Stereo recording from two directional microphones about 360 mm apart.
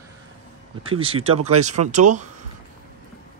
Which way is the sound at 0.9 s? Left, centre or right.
Centre.